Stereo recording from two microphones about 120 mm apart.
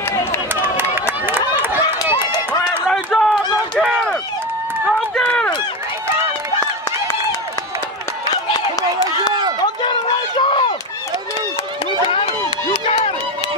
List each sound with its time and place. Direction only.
0.1 s run: 20° left (ahead or behind)
0.9 s a sound: 15° right (ahead or behind)
1.6 s run: 20° right (ahead or behind)
2.9 s run: 5° left (ahead or behind)
5.1 s run: 10° left (ahead or behind)
9.8 s run: 40° left (ahead or behind)
12.8 s run: 60° left (ahead or behind)